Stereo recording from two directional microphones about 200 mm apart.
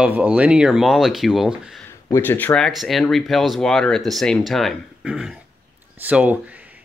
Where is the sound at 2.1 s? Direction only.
10° left (ahead or behind).